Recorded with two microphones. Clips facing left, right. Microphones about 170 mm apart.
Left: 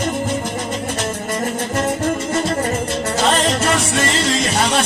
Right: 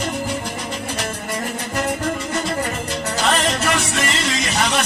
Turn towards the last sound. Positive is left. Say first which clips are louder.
# left 4 dB
turn(degrees=30)  # may be behind; listen again after turning